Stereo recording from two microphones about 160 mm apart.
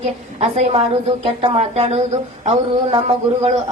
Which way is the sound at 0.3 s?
40° right (ahead or behind).